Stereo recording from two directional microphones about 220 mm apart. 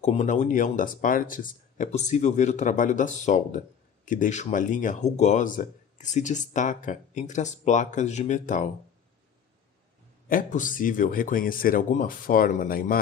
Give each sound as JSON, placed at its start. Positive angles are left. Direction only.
{"t": 0.0, "sound": "speech", "side_deg": 30}
{"t": 10.2, "sound": "speech", "side_deg": 40}